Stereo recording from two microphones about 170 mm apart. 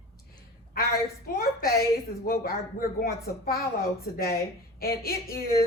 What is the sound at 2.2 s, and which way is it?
A woman's voice, 65° left (ahead or behind).